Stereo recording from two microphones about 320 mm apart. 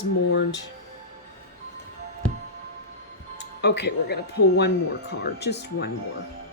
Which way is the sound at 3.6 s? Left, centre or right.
Left.